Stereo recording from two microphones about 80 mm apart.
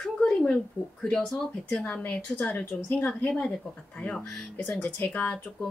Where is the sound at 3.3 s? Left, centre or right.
Centre.